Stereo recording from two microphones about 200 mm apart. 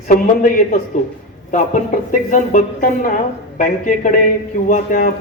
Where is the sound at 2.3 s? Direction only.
40° left (ahead or behind).